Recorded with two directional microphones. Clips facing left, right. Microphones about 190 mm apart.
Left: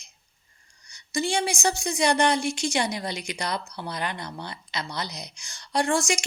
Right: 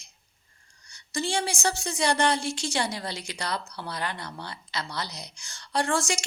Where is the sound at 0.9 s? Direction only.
15° left (ahead or behind).